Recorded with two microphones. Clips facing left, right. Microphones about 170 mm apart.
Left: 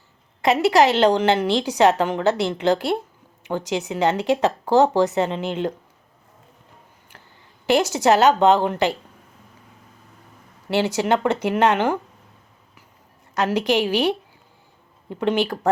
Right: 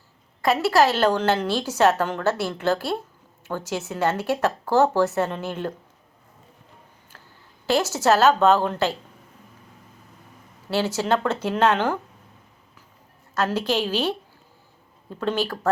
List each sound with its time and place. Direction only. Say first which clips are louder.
0.4 s a woman's voice: left 3 dB; 20° left (ahead or behind)
7.7 s a woman's voice: left 3 dB; 15° left (ahead or behind)
10.7 s a woman's voice: left 3 dB; 15° left (ahead or behind)
13.3 s a woman's voice: left 3 dB; 15° left (ahead or behind)